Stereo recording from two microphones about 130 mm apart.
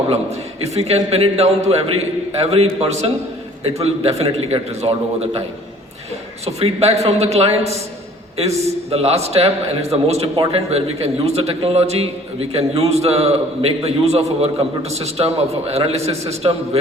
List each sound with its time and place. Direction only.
0.1 s a man's voice: 55° right (ahead or behind)
6.4 s a man's voice: 50° right (ahead or behind)